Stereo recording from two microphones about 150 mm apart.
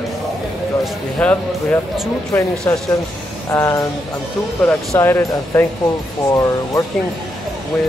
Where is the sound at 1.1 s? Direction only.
10° left (ahead or behind).